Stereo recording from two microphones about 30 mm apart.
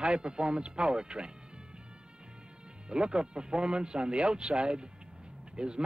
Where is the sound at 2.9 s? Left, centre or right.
Right.